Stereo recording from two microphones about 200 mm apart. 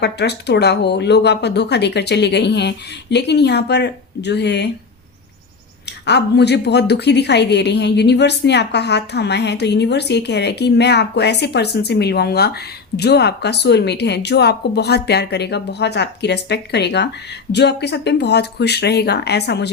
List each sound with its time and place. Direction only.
0.0 s a woman's voice: 55° left (ahead or behind)
6.1 s a woman's voice: 55° left (ahead or behind)